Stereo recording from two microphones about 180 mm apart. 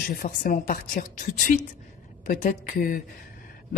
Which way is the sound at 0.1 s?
55° left (ahead or behind).